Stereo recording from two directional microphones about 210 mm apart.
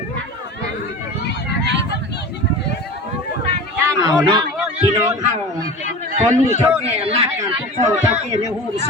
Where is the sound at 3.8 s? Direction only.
15° right (ahead or behind).